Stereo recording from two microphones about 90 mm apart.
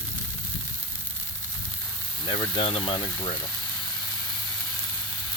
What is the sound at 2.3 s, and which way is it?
Speech, 60° left (ahead or behind).